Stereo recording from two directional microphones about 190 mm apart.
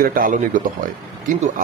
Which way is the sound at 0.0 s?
50° right (ahead or behind).